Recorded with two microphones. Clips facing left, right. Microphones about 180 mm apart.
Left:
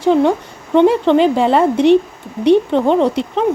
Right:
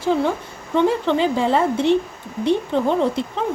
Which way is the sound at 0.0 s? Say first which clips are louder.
Left 7 dB; 65° left (ahead or behind).